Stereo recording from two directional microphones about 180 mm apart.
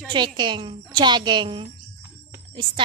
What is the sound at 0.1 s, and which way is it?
Speech, 25° right (ahead or behind).